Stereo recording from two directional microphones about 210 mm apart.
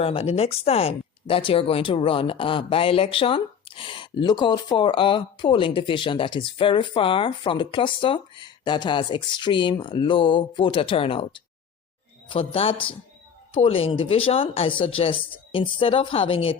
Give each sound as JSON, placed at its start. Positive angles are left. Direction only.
{"t": 0.0, "sound": "speech", "side_deg": 30}